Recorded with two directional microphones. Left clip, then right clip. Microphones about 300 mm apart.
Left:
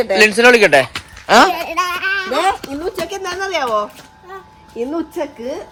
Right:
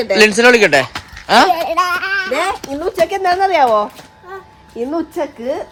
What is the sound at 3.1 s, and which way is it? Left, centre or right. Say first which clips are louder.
Speech: right 8 dB; right.